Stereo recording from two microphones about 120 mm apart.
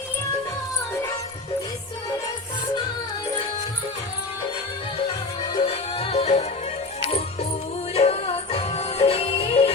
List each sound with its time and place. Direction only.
5.4 s music: 50° left (ahead or behind)
7.9 s music: 60° left (ahead or behind)